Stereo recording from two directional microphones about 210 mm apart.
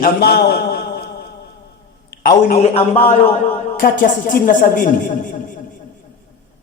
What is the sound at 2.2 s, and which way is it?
Speech, 45° left (ahead or behind).